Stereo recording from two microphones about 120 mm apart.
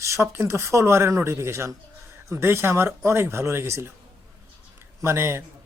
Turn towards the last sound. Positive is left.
turn(degrees=-20)  # may be behind; listen again after turning